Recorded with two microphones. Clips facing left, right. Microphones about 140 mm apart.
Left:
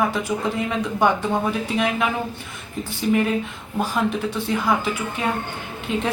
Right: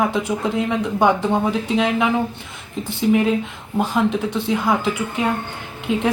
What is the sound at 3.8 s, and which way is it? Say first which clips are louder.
Speech: right 3 dB; 20° right (ahead or behind).